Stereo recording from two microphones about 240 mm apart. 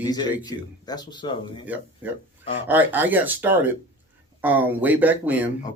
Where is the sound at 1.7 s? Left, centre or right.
Centre.